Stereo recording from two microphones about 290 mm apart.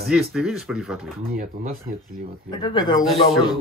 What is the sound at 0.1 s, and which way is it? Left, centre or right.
Speech, centre.